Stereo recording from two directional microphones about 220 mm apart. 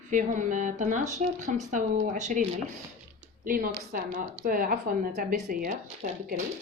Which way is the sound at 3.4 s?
40° right (ahead or behind).